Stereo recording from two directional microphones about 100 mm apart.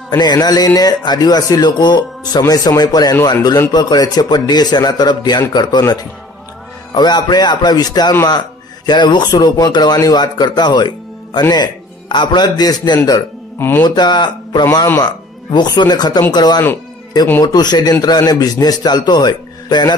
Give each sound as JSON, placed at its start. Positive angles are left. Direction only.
{"t": 0.2, "sound": "speech", "side_deg": 45}
{"t": 13.6, "sound": "speech", "side_deg": 20}
{"t": 13.8, "sound": "speech", "side_deg": 50}